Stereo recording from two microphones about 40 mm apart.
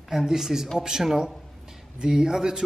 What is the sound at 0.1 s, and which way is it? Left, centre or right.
Speech, centre.